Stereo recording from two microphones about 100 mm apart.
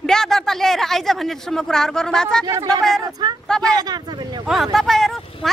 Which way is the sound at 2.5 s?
35° right (ahead or behind).